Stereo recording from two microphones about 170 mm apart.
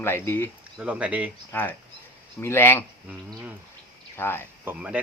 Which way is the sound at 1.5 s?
10° left (ahead or behind).